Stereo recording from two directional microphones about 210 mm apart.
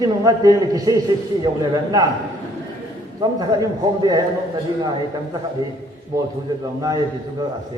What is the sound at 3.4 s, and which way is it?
Speech, 20° right (ahead or behind).